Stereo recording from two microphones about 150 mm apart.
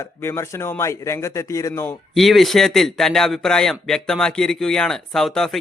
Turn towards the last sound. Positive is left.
turn(degrees=0)  # may be behind; listen again after turning